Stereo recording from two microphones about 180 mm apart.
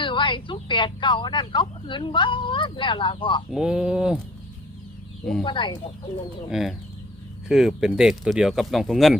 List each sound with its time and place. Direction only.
0.0 s a woman's voice: 25° left (ahead or behind)
3.5 s speech: 5° right (ahead or behind)
5.4 s a woman's voice: 25° left (ahead or behind)
6.5 s speech: centre (ahead or behind)